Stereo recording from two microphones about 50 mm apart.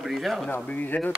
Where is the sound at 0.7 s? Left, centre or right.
Left.